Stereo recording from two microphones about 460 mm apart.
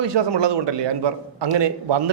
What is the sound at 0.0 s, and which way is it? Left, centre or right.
A man's voice, right.